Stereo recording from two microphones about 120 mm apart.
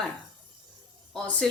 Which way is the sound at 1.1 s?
10° left (ahead or behind).